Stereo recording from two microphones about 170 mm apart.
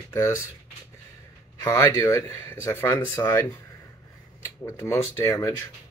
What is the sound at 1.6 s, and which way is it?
Speech, 15° left (ahead or behind).